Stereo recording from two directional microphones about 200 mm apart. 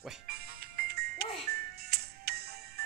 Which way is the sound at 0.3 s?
50° right (ahead or behind).